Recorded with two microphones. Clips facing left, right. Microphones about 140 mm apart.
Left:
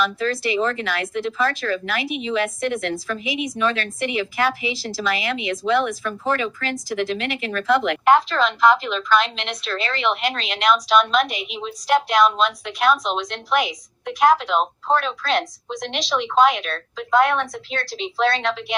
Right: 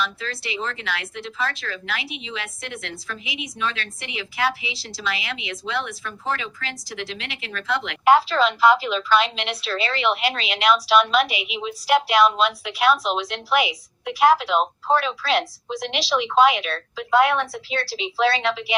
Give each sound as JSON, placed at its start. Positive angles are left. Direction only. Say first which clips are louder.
{"t": 0.0, "sound": "speech", "louder": "left 7 dB", "side_deg": 50}
{"t": 8.0, "sound": "a woman's voice", "louder": "right 3 dB", "side_deg": -5}